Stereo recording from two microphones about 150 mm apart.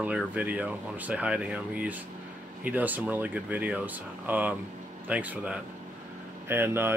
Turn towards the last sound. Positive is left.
turn(degrees=-15)  # may be behind; listen again after turning